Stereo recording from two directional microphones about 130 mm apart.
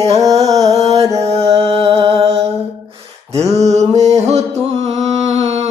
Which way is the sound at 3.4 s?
55° right (ahead or behind).